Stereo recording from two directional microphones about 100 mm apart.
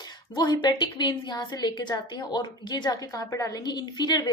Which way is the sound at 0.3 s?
45° left (ahead or behind).